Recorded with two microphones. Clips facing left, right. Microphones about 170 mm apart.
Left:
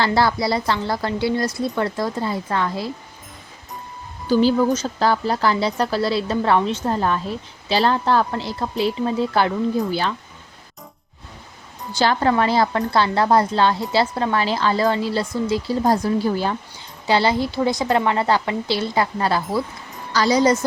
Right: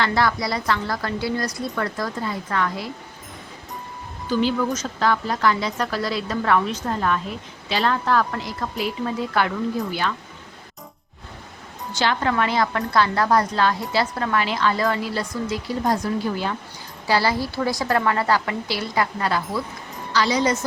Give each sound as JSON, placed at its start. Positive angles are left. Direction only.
{"t": 0.0, "sound": "a woman's voice", "side_deg": 30}
{"t": 4.3, "sound": "a woman's voice", "side_deg": 35}
{"t": 11.9, "sound": "a woman's voice", "side_deg": 35}
{"t": 17.1, "sound": "a woman's voice", "side_deg": 25}